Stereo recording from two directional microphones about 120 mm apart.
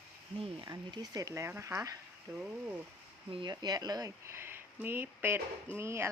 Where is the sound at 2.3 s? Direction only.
10° right (ahead or behind).